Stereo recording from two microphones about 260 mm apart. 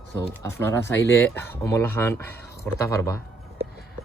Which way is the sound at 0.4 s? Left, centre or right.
Centre.